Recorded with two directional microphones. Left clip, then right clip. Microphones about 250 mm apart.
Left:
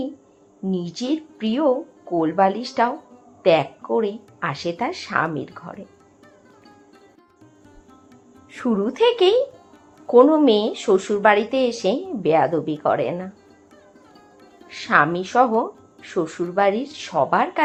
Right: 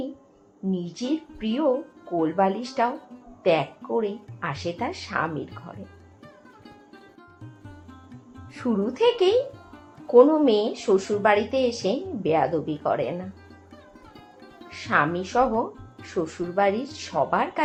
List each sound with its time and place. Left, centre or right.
0.7 s a woman's voice: left
8.5 s a woman's voice: left
14.7 s a woman's voice: left